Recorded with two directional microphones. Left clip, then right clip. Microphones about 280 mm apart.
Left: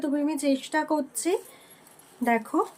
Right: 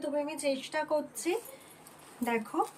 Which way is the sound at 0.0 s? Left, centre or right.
Centre.